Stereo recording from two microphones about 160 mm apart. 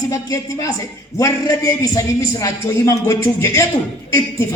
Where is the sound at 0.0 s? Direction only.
20° left (ahead or behind).